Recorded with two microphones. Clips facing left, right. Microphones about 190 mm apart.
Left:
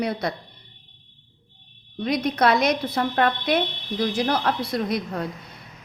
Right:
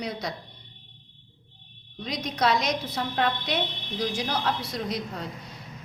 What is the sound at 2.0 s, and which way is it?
A woman's voice, 55° left (ahead or behind).